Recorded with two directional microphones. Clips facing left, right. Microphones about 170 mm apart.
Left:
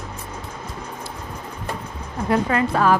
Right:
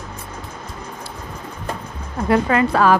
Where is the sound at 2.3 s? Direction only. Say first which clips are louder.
Right 3 dB; 85° right.